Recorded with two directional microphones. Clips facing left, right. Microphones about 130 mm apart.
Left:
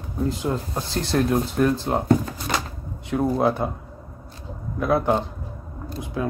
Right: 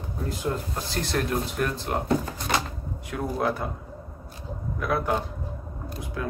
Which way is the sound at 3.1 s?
25° left (ahead or behind).